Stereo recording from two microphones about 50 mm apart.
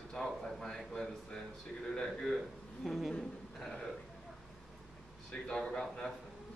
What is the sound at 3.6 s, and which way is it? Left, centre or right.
Speech, centre.